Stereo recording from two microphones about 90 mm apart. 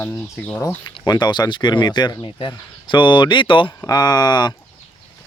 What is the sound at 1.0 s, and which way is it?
Speech, 55° left (ahead or behind).